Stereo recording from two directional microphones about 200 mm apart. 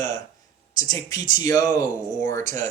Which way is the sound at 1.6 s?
40° right (ahead or behind).